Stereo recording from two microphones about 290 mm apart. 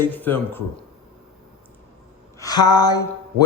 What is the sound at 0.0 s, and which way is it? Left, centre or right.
Speech, centre.